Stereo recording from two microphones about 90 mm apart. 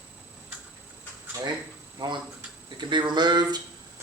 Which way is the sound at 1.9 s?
55° right (ahead or behind).